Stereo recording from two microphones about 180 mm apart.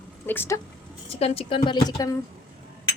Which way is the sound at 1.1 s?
35° left (ahead or behind).